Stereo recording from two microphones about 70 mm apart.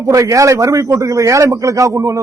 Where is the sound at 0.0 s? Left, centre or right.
Right.